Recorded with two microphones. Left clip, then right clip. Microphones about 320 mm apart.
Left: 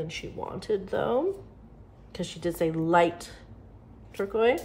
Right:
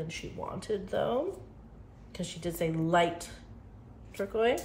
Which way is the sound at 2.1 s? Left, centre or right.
Centre.